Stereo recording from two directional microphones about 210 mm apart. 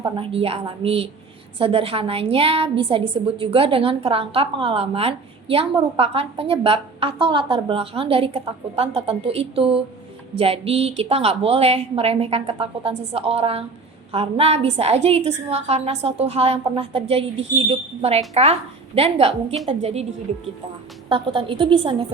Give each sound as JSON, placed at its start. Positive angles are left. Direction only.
{"t": 0.0, "sound": "a woman's voice", "side_deg": -25}
{"t": 21.1, "sound": "a woman's voice", "side_deg": -25}